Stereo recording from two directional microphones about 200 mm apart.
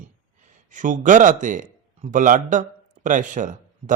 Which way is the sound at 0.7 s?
40° right (ahead or behind).